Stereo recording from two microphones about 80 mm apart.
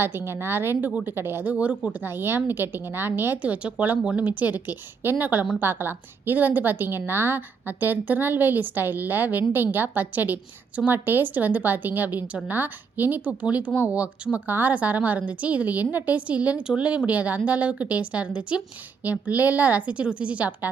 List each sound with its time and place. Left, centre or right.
0.0 s a woman's voice: right
0.9 s a woman's voice: centre
1.1 s a woman's voice: right